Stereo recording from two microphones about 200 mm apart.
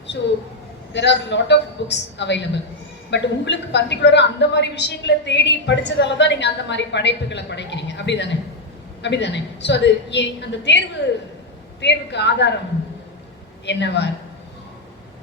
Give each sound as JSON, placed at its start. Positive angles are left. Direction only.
{"t": 0.9, "sound": "a woman's voice", "side_deg": 60}
{"t": 13.7, "sound": "a woman's voice", "side_deg": 60}